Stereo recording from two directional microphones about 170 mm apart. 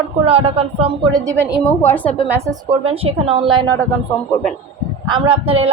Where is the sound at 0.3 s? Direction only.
35° right (ahead or behind).